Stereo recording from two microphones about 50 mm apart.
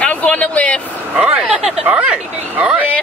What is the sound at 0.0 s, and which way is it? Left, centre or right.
Vehicle, left.